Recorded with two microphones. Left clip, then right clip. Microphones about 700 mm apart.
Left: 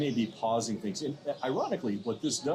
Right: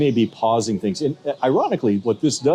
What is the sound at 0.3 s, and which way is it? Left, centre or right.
Speech, right.